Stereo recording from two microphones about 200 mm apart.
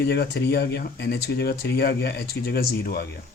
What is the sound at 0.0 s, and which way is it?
Speech, 55° left (ahead or behind).